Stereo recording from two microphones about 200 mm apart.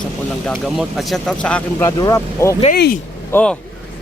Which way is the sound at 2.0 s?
15° left (ahead or behind).